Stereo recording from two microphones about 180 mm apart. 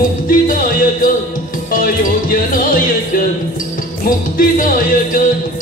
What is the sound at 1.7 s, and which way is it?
Music, 50° left (ahead or behind).